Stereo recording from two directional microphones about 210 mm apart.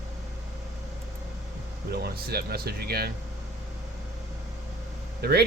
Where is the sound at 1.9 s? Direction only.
50° right (ahead or behind).